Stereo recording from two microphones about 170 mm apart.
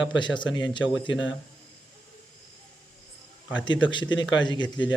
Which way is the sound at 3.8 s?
25° left (ahead or behind).